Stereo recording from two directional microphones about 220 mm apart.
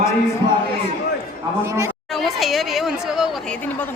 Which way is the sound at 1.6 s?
15° right (ahead or behind).